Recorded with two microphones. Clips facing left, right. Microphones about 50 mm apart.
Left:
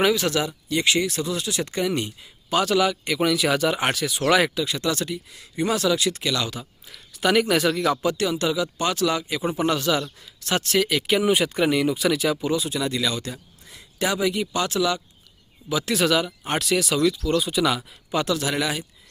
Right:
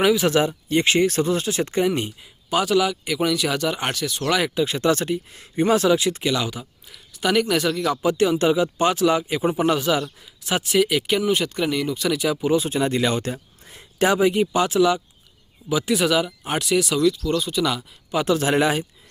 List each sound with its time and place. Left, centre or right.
0.0 s a man's voice: centre
0.3 s speech: right
1.9 s a man's voice: centre
2.5 s speech: centre
4.5 s speech: right; by 6.7 s centre
6.8 s speech: centre
8.1 s a man's voice: right; by 11.2 s centre
11.2 s speech: centre
12.5 s speech: right; by 18.2 s centre
18.3 s speech: right